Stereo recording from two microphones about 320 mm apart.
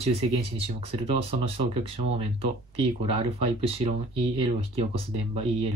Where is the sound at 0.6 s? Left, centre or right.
Centre.